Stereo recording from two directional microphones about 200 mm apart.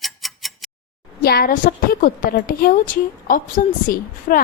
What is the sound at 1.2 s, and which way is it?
A woman's voice, 50° left (ahead or behind).